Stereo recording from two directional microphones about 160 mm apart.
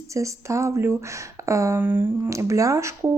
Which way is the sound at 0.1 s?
20° right (ahead or behind).